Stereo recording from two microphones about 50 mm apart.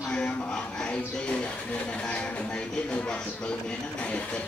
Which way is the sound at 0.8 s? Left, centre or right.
Left.